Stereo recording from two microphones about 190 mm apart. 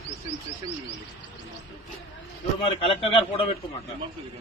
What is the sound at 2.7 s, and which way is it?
Speech, 30° left (ahead or behind).